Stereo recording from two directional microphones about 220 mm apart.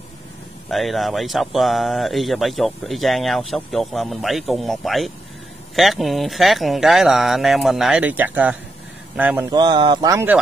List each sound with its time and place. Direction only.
0.7 s speech: centre (ahead or behind)
9.5 s speech: 20° right (ahead or behind)